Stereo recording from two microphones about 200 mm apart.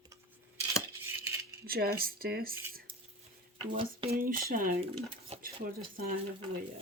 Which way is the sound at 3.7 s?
25° right (ahead or behind).